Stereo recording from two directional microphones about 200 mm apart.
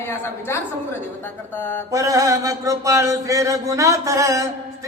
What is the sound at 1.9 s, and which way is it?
Mantra, 15° right (ahead or behind).